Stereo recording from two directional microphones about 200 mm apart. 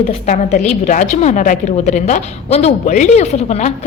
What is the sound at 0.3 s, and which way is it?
A woman's voice, 35° left (ahead or behind).